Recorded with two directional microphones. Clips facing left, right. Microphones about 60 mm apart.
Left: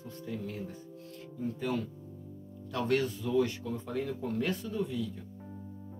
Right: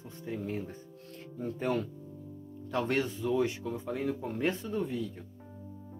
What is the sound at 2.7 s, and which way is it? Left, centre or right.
Speech, right.